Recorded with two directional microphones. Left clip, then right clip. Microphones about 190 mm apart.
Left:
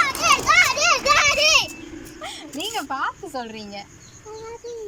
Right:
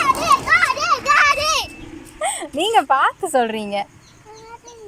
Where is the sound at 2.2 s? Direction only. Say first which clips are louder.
Right 10 dB; 45° right (ahead or behind).